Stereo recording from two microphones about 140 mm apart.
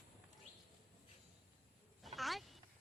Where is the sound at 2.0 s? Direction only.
Centre (ahead or behind).